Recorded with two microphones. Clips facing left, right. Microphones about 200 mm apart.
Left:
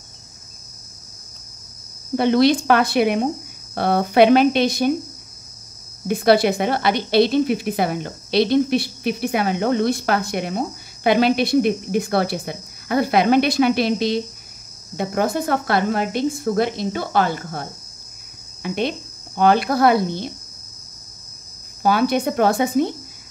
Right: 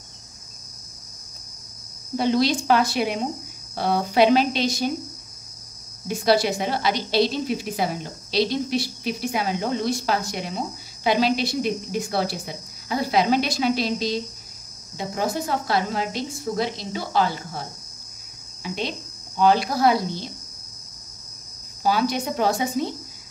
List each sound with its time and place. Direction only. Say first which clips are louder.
2.1 s a woman's voice: left 5 dB; 60° left (ahead or behind)
6.0 s a woman's voice: left 5 dB; 60° left (ahead or behind)
21.8 s a woman's voice: left 4 dB; 55° left (ahead or behind)